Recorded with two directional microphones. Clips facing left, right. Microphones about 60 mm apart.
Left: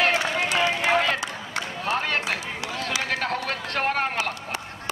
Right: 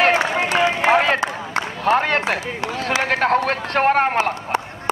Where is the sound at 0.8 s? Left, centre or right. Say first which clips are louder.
Right 6 dB; right.